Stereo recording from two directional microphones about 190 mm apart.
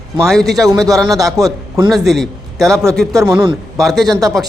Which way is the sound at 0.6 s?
20° right (ahead or behind).